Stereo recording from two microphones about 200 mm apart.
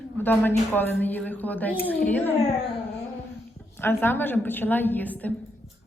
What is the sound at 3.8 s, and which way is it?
A woman's voice, 10° left (ahead or behind).